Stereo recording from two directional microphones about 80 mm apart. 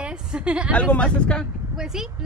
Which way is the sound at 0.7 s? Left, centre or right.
Centre.